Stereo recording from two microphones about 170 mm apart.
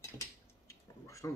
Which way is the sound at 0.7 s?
15° left (ahead or behind).